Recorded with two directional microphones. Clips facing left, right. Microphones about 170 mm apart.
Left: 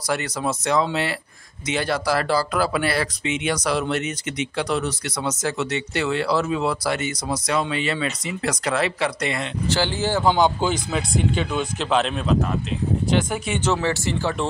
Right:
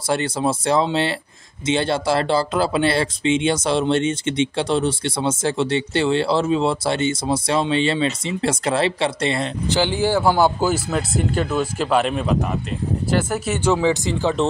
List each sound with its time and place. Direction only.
0.1 s speech: 30° right (ahead or behind)
9.7 s speech: 15° right (ahead or behind)